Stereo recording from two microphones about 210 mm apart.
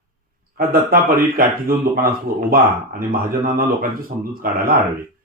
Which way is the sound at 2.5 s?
45° right (ahead or behind).